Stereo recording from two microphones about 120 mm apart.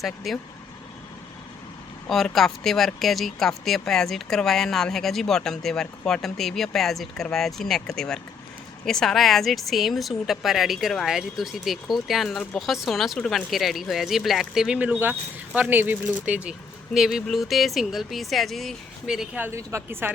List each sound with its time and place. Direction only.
0.0 s a woman's voice: centre (ahead or behind)
2.0 s a woman's voice: centre (ahead or behind)
19.5 s a woman's voice: 20° right (ahead or behind)